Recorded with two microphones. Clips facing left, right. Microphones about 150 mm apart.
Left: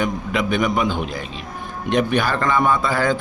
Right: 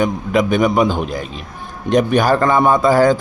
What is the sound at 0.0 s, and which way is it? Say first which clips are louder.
Speech: right 6 dB; 40° right (ahead or behind).